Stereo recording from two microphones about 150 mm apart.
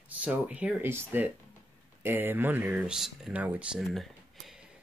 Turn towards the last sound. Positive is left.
turn(degrees=0)  # may be behind; listen again after turning